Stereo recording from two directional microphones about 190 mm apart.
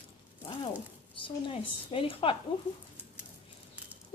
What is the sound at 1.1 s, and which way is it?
A woman's voice, 25° left (ahead or behind).